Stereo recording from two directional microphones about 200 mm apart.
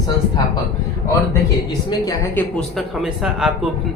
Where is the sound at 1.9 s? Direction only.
15° left (ahead or behind).